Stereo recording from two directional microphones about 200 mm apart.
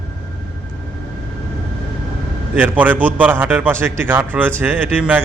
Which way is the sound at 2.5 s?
10° right (ahead or behind).